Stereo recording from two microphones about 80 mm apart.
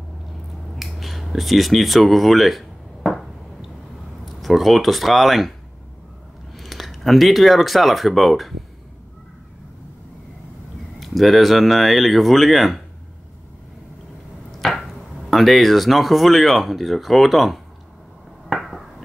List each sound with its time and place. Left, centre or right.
0.7 s a sound: centre
4.4 s speech: centre
6.5 s speech: centre
11.0 s speech: centre
14.6 s speech: centre
18.5 s a sound: centre